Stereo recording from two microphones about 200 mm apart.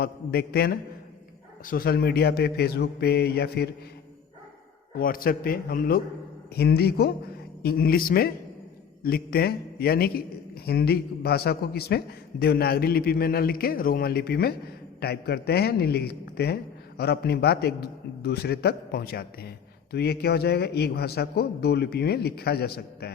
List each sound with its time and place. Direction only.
0.0 s a man's voice: 50° left (ahead or behind)
4.9 s a man's voice: 45° left (ahead or behind)